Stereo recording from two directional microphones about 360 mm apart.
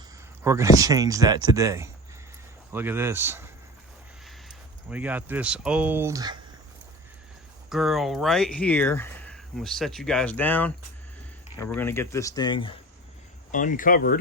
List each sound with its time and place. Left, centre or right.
0.4 s speech: centre
7.7 s speech: centre; by 14.2 s left